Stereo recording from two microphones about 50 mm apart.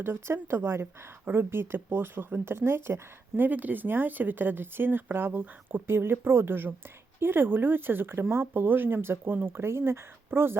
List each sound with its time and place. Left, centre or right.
0.3 s speech: right
1.2 s speech: right